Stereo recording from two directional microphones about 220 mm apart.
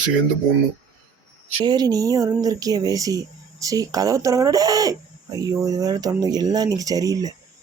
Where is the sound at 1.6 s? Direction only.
20° right (ahead or behind).